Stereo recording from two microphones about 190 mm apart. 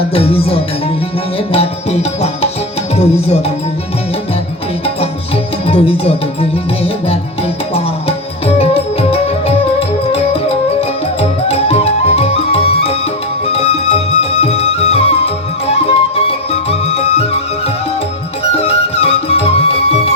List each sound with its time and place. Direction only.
0.1 s music: 30° left (ahead or behind)
5.6 s music: 30° left (ahead or behind)
18.5 s music: 30° left (ahead or behind)